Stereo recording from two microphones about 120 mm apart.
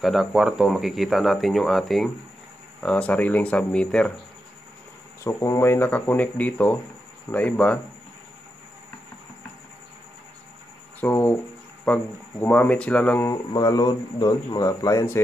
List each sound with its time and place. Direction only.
0.0 s speech: centre (ahead or behind)
5.2 s speech: 25° left (ahead or behind)
11.0 s speech: 15° left (ahead or behind)
13.3 s speech: 30° left (ahead or behind)